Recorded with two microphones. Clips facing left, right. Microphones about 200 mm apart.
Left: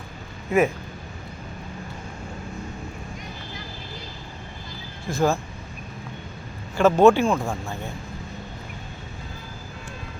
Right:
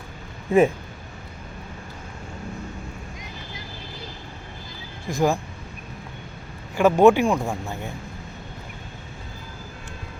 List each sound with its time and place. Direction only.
0.5 s speech: 30° right (ahead or behind)
5.0 s speech: 15° right (ahead or behind)
6.7 s speech: 15° right (ahead or behind)